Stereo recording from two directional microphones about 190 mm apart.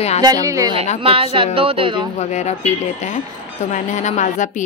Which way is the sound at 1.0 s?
30° right (ahead or behind).